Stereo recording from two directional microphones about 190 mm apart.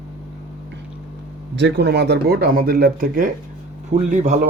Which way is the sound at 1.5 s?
65° right (ahead or behind).